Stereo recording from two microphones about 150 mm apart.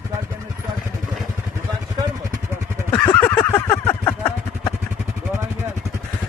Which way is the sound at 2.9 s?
10° left (ahead or behind).